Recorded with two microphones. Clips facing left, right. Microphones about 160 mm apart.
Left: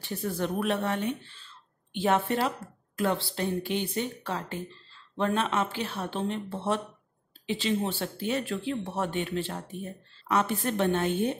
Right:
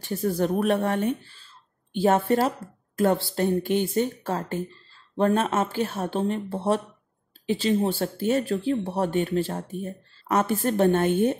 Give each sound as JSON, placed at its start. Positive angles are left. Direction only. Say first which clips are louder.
{"t": 0.0, "sound": "speech", "louder": "right 6 dB", "side_deg": -40}